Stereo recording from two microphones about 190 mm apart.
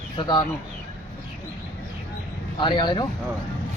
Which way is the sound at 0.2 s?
25° left (ahead or behind).